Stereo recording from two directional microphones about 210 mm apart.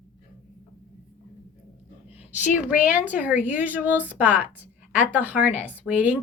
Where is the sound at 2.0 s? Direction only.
35° left (ahead or behind).